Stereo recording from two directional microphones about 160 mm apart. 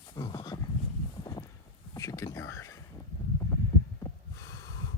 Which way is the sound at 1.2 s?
20° left (ahead or behind).